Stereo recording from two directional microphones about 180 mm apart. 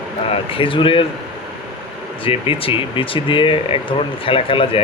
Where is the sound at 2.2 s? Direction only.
30° left (ahead or behind).